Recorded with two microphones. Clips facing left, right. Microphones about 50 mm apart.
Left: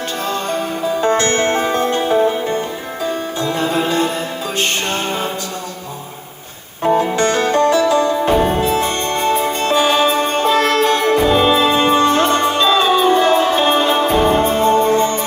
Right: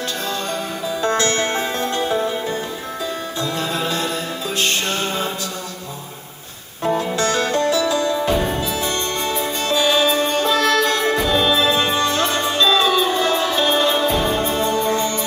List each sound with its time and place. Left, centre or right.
0.5 s music: left
3.5 s music: left
6.8 s music: left